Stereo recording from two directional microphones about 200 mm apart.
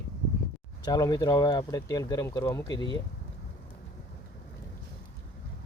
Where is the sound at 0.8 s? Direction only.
20° left (ahead or behind).